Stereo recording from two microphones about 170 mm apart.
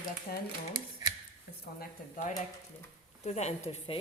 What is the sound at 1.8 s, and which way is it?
A woman's voice, 45° left (ahead or behind).